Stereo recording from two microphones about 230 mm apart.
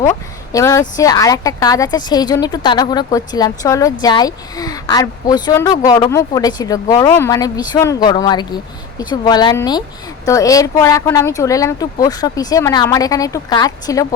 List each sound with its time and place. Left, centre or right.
0.5 s a woman's voice: centre